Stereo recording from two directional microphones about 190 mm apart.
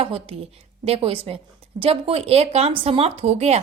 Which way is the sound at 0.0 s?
30° right (ahead or behind).